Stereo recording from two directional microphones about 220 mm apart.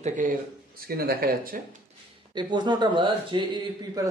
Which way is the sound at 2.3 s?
20° right (ahead or behind).